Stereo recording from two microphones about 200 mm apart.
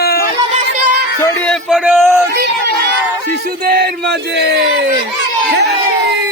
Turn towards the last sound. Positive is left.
turn(degrees=-50)  # may be behind; listen again after turning